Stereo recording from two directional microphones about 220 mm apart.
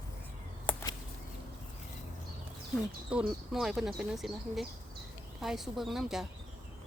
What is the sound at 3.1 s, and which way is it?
Speech, 5° right (ahead or behind).